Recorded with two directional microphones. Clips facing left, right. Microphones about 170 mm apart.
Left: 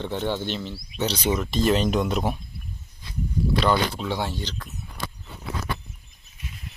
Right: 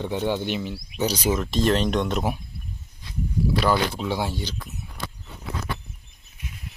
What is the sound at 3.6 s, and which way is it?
Speech, 5° right (ahead or behind).